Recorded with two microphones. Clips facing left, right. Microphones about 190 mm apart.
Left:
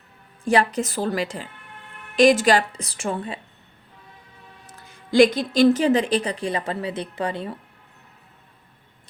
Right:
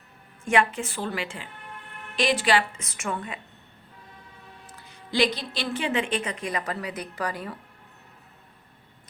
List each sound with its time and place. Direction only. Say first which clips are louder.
0.4 s speech: left 4 dB; 35° left (ahead or behind)
4.6 s speech: left 1 dB; 45° left (ahead or behind); by 7.6 s 25° left (ahead or behind)